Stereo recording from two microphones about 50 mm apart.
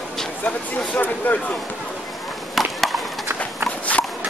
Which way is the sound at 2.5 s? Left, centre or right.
Centre.